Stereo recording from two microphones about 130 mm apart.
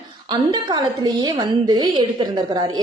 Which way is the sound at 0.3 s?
35° right (ahead or behind).